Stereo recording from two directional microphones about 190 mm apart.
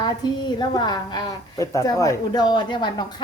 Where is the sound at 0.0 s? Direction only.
20° left (ahead or behind).